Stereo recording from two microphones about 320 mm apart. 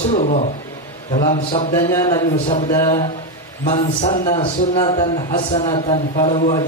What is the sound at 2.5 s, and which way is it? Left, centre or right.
Speech, left.